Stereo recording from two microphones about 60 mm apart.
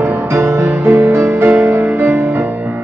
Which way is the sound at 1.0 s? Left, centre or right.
Right.